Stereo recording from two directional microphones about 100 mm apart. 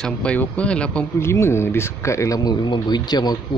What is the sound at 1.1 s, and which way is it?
A man's voice, 25° left (ahead or behind).